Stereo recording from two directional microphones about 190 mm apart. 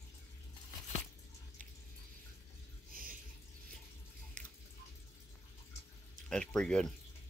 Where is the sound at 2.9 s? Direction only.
50° right (ahead or behind).